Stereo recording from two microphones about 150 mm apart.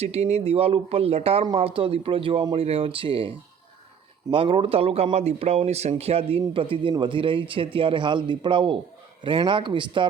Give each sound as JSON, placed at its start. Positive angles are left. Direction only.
{"t": 0.0, "sound": "speech", "side_deg": -45}